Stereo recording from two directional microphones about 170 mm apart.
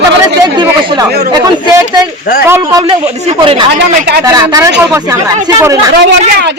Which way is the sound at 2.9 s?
30° right (ahead or behind).